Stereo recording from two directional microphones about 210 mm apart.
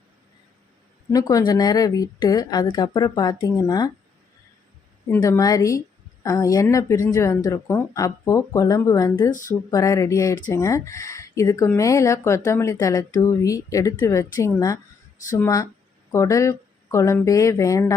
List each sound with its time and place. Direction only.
1.1 s a woman's voice: 20° left (ahead or behind)
5.1 s speech: 10° left (ahead or behind)